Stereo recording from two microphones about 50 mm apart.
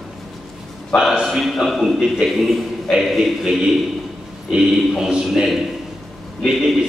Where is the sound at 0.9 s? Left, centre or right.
Left.